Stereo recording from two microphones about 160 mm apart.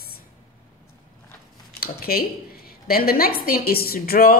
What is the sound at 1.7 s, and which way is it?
A woman's voice, 70° left (ahead or behind).